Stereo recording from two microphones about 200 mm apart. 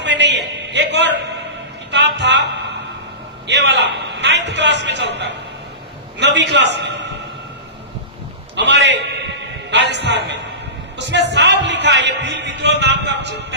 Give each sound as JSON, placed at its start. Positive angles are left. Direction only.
{"t": 0.0, "sound": "a sound", "side_deg": -60}
{"t": 3.4, "sound": "a man's voice", "side_deg": -60}
{"t": 8.5, "sound": "a man's voice", "side_deg": -60}